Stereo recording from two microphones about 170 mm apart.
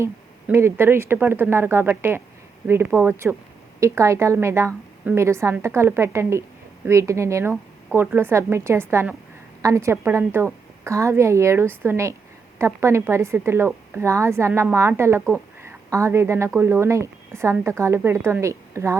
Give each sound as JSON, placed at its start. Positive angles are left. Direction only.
{"t": 0.0, "sound": "speech", "side_deg": -15}